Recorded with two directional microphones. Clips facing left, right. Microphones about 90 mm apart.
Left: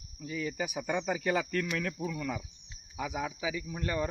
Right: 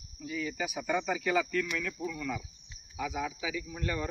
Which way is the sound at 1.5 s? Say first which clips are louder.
Even; 50° left (ahead or behind).